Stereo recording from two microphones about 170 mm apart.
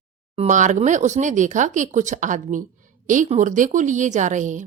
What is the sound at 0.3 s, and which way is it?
Speech, 45° right (ahead or behind).